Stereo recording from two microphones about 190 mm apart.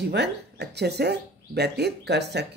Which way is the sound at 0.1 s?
60° right (ahead or behind).